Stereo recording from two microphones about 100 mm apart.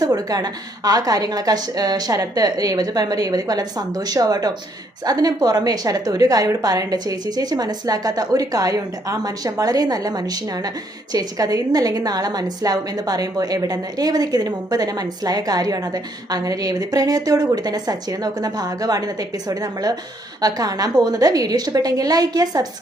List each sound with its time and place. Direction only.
0.0 s a woman's voice: 40° right (ahead or behind)